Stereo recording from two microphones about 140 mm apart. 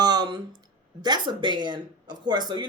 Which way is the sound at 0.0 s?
30° right (ahead or behind).